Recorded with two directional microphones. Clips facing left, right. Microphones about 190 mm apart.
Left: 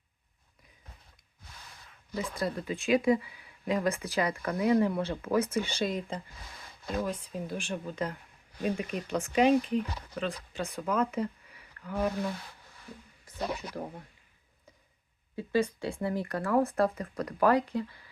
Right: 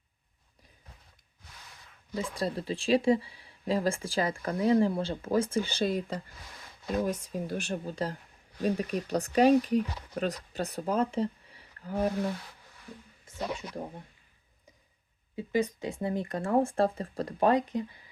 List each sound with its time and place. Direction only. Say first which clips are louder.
2.1 s speech: right 1 dB; 30° right (ahead or behind)
15.4 s speech: even; 15° right (ahead or behind)